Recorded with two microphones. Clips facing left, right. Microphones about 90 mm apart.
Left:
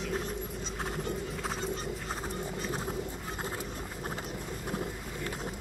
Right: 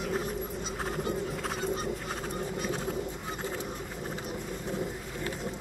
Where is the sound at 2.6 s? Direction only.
Centre (ahead or behind).